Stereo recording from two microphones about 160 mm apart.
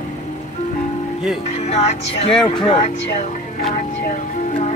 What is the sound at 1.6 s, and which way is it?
Speech, 40° left (ahead or behind).